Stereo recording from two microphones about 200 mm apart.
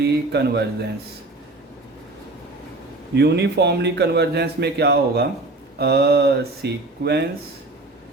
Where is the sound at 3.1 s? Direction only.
55° right (ahead or behind).